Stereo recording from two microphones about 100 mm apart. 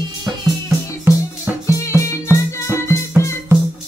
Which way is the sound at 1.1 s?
20° right (ahead or behind).